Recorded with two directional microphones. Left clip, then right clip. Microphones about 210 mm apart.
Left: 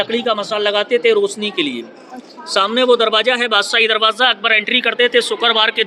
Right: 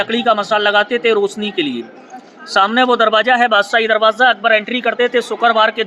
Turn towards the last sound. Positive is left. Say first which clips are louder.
# right 2 dB
turn(degrees=-30)  # may be behind; listen again after turning